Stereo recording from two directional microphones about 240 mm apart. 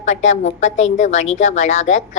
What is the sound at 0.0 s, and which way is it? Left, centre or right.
A woman's voice, left.